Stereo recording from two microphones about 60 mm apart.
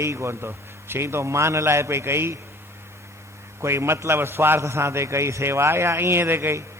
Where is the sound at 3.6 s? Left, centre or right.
Right.